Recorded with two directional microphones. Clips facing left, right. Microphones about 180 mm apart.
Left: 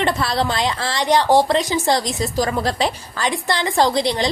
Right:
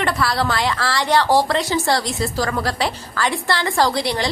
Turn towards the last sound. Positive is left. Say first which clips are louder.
# left 2 dB
turn(degrees=20)  # may be behind; listen again after turning